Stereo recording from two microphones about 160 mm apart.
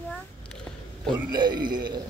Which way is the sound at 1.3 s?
30° right (ahead or behind).